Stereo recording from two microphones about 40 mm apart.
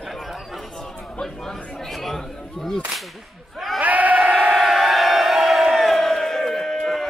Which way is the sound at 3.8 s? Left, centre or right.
Right.